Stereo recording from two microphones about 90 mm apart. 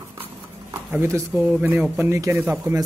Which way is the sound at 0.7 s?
25° right (ahead or behind).